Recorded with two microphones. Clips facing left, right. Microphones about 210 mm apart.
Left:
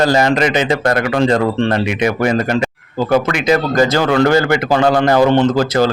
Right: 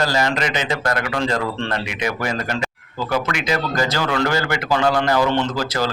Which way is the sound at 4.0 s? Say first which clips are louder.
Left 8 dB; 55° left (ahead or behind).